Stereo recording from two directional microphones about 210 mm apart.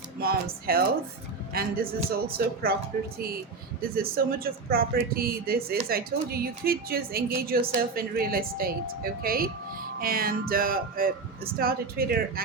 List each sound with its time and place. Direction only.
0.2 s speech: 45° right (ahead or behind)
3.8 s speech: 45° right (ahead or behind)